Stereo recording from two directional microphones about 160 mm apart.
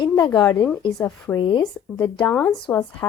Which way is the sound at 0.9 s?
15° left (ahead or behind).